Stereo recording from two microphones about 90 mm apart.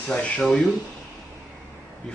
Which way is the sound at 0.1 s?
15° left (ahead or behind).